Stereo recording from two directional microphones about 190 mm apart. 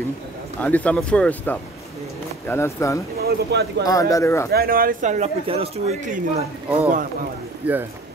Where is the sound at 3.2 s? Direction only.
60° right (ahead or behind).